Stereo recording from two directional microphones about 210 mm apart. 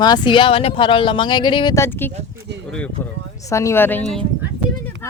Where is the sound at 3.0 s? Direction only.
15° left (ahead or behind).